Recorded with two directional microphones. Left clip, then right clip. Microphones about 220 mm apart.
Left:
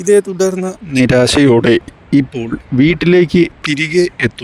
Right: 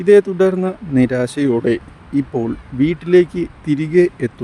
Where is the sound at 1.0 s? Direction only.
45° left (ahead or behind).